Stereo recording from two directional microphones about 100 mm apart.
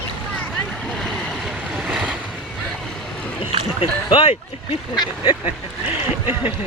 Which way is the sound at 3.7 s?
65° left (ahead or behind).